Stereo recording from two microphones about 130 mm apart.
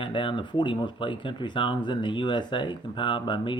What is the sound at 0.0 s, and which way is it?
Speech, 40° left (ahead or behind).